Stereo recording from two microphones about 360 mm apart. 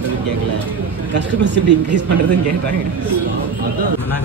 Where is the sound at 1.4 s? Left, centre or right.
Right.